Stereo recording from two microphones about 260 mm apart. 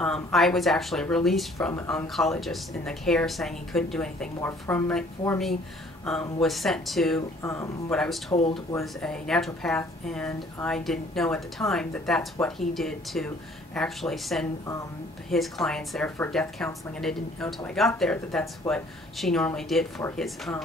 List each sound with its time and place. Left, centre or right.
0.0 s speech: centre
8.3 s speech: centre
9.0 s speech: centre